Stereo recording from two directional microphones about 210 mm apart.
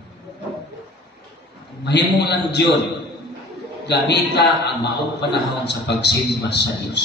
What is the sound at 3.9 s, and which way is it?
A man's voice, 55° left (ahead or behind).